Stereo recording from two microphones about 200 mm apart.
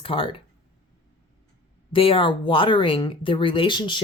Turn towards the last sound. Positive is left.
turn(degrees=25)  # may be behind; listen again after turning